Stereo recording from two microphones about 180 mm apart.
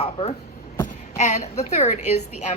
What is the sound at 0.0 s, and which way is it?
A woman's voice, 35° left (ahead or behind).